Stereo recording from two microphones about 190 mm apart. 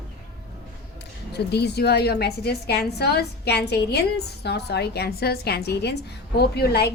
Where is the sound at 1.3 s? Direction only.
60° left (ahead or behind).